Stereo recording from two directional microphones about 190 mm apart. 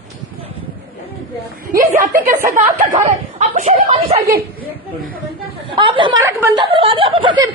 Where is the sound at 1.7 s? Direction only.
45° right (ahead or behind).